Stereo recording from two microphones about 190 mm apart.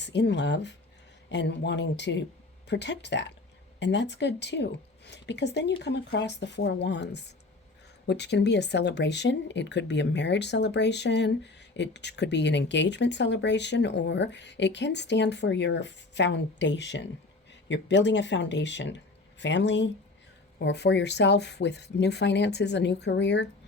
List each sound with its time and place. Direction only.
0.0 s speech: 65° left (ahead or behind)